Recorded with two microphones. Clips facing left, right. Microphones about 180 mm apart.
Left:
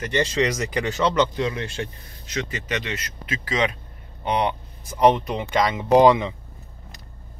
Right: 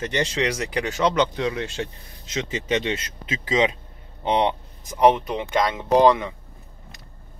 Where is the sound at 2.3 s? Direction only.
25° right (ahead or behind); by 6.3 s 15° left (ahead or behind).